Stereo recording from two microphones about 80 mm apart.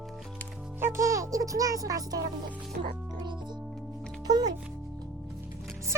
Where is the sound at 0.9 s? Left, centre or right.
Right.